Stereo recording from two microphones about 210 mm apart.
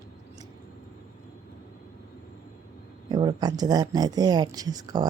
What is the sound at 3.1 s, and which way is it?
Speech, 20° right (ahead or behind).